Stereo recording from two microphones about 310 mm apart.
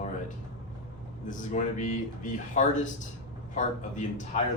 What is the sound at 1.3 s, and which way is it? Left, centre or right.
Speech, left.